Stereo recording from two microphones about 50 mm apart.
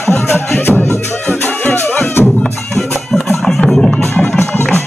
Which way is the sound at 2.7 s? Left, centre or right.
Centre.